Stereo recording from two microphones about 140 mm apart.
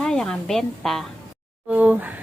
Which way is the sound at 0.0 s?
5° left (ahead or behind).